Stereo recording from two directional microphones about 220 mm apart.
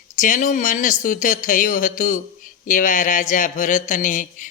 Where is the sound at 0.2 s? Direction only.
35° left (ahead or behind).